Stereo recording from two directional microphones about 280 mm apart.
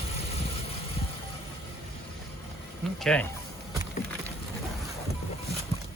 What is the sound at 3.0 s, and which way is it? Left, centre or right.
Speech, centre.